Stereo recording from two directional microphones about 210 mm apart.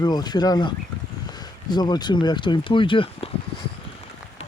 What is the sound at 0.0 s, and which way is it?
Speech, 20° left (ahead or behind).